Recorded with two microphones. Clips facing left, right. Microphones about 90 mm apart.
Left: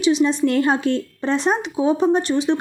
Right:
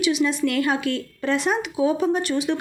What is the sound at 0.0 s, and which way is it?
A woman's voice, 30° left (ahead or behind).